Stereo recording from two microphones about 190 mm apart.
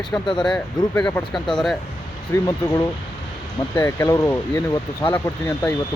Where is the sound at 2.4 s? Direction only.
20° left (ahead or behind).